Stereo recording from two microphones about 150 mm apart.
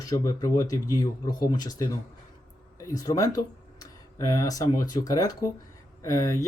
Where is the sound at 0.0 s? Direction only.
20° left (ahead or behind).